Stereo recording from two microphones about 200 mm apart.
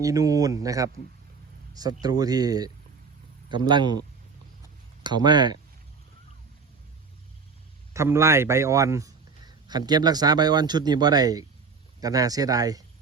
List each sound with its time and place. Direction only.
0.0 s speech: 15° right (ahead or behind)
5.0 s speech: 20° right (ahead or behind)
7.9 s speech: 15° right (ahead or behind)